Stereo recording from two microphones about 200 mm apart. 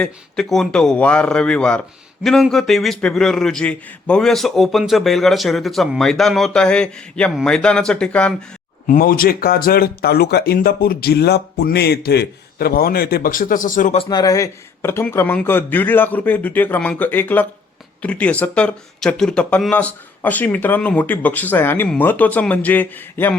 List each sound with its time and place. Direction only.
0.0 s a man's voice: 5° left (ahead or behind)
8.9 s speech: 45° left (ahead or behind)
14.0 s speech: 20° left (ahead or behind)